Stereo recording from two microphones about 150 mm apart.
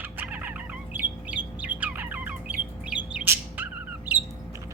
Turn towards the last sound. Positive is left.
turn(degrees=-10)  # may be behind; listen again after turning